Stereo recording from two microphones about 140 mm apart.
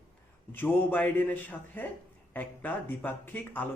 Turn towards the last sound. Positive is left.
turn(degrees=10)  # may be behind; listen again after turning